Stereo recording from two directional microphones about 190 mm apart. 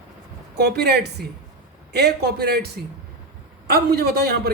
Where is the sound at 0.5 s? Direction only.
60° right (ahead or behind).